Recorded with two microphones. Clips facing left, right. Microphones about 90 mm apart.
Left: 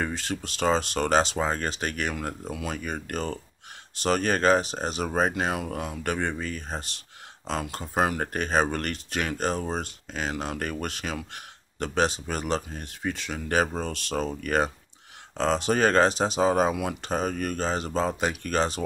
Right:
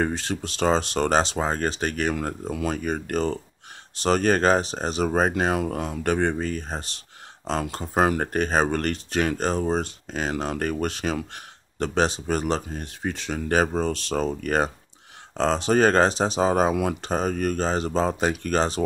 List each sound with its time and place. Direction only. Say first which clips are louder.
0.1 s speech: right 3 dB; 30° right (ahead or behind)